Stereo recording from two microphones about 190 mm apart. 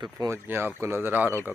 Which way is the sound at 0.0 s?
20° right (ahead or behind).